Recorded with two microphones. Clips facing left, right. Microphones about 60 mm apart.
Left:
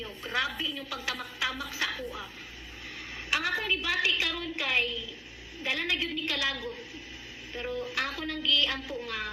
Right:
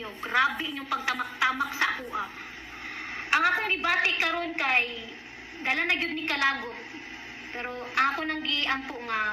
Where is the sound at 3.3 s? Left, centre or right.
Right.